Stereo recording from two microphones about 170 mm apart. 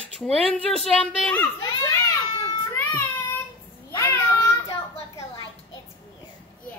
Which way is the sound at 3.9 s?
15° left (ahead or behind).